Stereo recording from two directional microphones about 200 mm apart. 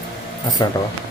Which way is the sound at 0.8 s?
20° left (ahead or behind).